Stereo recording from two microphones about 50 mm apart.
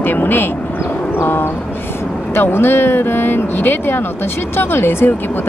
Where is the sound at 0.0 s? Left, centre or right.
Left.